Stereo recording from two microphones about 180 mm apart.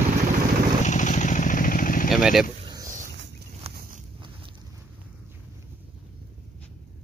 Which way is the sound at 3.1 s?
65° right (ahead or behind).